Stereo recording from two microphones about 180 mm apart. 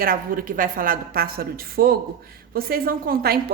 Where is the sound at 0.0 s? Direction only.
50° right (ahead or behind).